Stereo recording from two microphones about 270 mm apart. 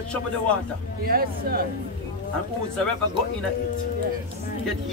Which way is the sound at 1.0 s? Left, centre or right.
Right.